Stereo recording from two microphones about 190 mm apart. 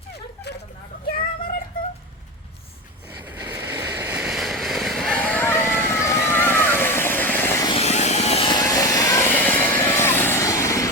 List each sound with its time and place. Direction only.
3.2 s vehicle: 10° right (ahead or behind); by 7.7 s 10° left (ahead or behind)
7.7 s vehicle: 35° left (ahead or behind); by 10.8 s 15° left (ahead or behind)